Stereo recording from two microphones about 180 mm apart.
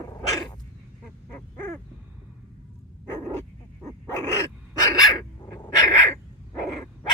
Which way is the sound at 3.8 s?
15° left (ahead or behind).